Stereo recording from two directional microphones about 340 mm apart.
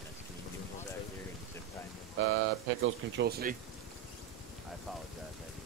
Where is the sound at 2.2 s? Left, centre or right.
Right.